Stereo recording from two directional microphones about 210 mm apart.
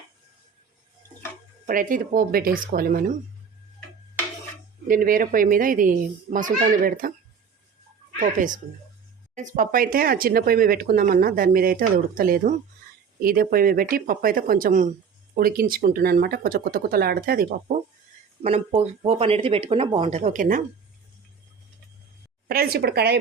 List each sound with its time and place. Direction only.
1.6 s a child's voice: 40° right (ahead or behind)
4.9 s a child's voice: 40° right (ahead or behind)
8.2 s a child's voice: 40° right (ahead or behind)
18.4 s speech: 30° right (ahead or behind)
22.4 s speech: 45° right (ahead or behind)